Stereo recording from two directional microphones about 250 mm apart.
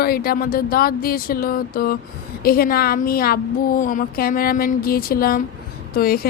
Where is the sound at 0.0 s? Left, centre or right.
Left.